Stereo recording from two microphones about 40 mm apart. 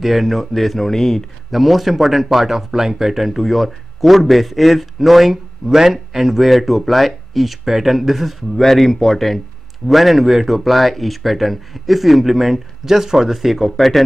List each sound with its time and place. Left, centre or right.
0.0 s speech: centre